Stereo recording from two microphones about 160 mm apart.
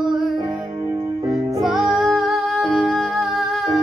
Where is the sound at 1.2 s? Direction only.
20° right (ahead or behind).